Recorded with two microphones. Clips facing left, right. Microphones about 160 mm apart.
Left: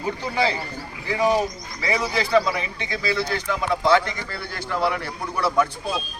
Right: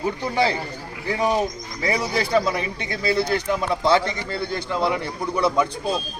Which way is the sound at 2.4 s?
40° right (ahead or behind).